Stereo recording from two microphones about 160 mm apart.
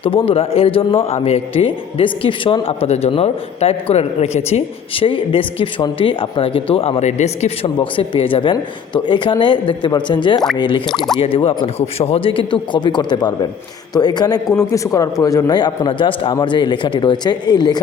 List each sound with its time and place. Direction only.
0.0 s a man's voice: 35° left (ahead or behind)
7.8 s a man's voice: 30° left (ahead or behind)
10.8 s speech: centre (ahead or behind)
11.2 s a man's voice: 35° left (ahead or behind)